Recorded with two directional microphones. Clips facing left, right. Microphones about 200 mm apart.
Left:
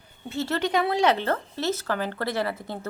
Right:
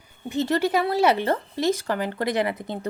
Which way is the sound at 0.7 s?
5° right (ahead or behind).